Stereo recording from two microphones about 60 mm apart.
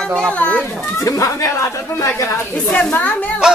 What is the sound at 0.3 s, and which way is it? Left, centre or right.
Speech, left.